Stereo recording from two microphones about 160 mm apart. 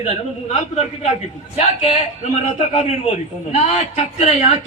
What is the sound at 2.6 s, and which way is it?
A man's voice, 45° left (ahead or behind).